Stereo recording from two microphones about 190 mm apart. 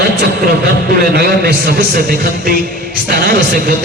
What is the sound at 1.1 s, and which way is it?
A man's voice, 55° right (ahead or behind).